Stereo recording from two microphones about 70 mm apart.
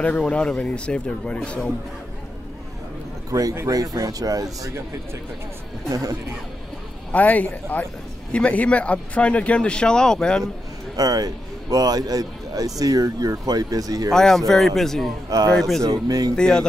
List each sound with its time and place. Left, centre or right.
0.3 s speech: centre
3.3 s a man's voice: right
5.9 s speech: right
7.1 s a man's voice: left
11.0 s a man's voice: right
14.1 s speech: centre
15.2 s speech: right
15.5 s speech: centre
15.8 s a man's voice: right
16.3 s speech: centre